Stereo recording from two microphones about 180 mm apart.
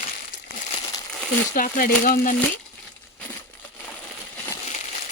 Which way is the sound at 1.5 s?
50° left (ahead or behind).